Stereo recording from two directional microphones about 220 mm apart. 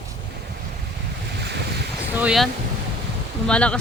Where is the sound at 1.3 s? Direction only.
50° right (ahead or behind).